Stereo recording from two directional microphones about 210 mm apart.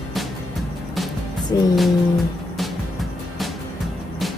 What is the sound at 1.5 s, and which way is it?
Music, 20° left (ahead or behind).